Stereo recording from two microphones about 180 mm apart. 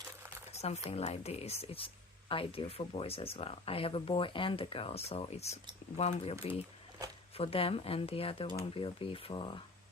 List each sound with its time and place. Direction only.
0.5 s speech: 35° left (ahead or behind)
7.3 s speech: 30° left (ahead or behind)